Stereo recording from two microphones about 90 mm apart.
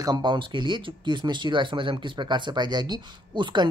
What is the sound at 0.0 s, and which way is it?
Speech, 50° right (ahead or behind).